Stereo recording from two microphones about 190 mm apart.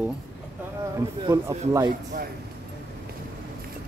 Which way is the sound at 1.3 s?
15° right (ahead or behind).